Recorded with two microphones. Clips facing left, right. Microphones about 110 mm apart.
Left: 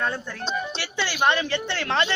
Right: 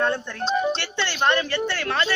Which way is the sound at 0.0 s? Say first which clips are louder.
Right 4 dB; 5° left (ahead or behind).